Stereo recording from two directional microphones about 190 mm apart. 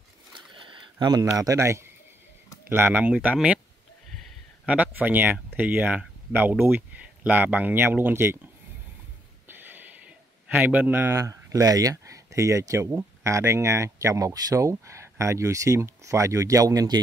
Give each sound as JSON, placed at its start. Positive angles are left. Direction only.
{"t": 0.3, "sound": "a sound", "side_deg": -25}
{"t": 2.7, "sound": "speech", "side_deg": -10}
{"t": 4.6, "sound": "speech", "side_deg": -5}
{"t": 9.5, "sound": "speech", "side_deg": -10}